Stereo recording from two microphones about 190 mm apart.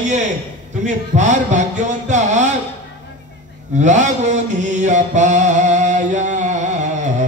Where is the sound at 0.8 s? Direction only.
40° right (ahead or behind).